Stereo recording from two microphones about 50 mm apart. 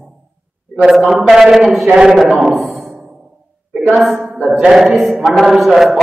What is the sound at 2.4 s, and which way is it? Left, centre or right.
Speech, centre.